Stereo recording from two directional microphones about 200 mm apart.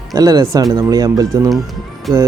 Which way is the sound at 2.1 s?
Centre (ahead or behind).